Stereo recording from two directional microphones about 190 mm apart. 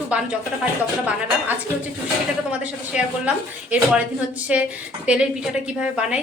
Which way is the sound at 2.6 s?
5° right (ahead or behind).